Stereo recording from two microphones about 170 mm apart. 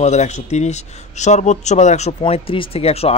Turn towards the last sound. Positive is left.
turn(degrees=35)  # may be behind; listen again after turning